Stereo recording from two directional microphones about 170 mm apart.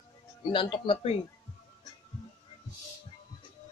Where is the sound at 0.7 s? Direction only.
30° left (ahead or behind).